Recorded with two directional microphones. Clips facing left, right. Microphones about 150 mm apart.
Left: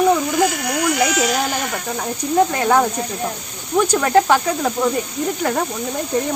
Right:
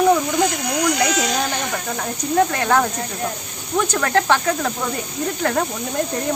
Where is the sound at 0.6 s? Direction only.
20° right (ahead or behind).